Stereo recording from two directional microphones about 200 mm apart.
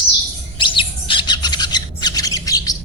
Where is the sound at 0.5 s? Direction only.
25° left (ahead or behind).